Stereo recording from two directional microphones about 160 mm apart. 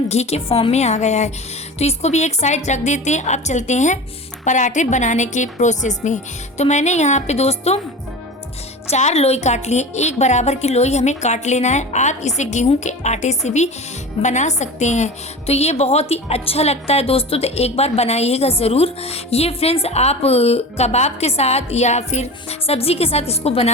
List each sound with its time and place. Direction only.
0.1 s a woman's voice: 45° left (ahead or behind)
8.9 s a woman's voice: 45° left (ahead or behind)